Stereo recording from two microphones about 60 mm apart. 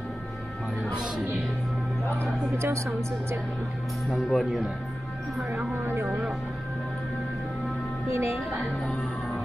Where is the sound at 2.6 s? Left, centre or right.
Right.